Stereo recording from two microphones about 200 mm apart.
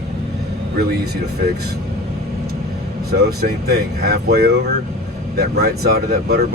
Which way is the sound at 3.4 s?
55° right (ahead or behind).